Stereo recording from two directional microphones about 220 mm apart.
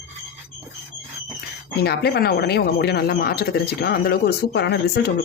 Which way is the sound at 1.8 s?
45° left (ahead or behind).